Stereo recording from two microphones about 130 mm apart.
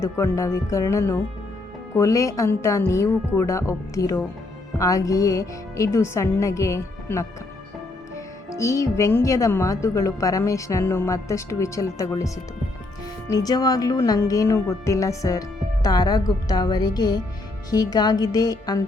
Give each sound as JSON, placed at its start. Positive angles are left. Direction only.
{"t": 0.0, "sound": "speech", "side_deg": 25}
{"t": 8.4, "sound": "speech", "side_deg": 25}
{"t": 17.7, "sound": "music", "side_deg": 30}